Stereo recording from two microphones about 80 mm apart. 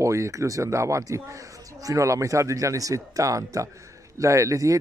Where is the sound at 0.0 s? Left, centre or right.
Right.